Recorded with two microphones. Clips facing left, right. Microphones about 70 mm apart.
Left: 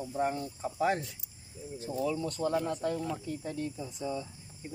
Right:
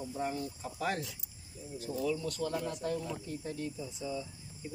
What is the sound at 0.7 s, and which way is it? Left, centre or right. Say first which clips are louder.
Speech: left 6 dB; centre.